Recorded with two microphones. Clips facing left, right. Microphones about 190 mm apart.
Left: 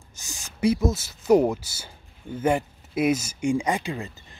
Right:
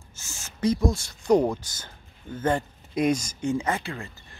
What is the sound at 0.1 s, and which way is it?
Speech, 15° left (ahead or behind).